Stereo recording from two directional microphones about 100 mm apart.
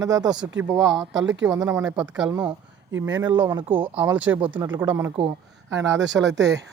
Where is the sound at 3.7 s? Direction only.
20° right (ahead or behind).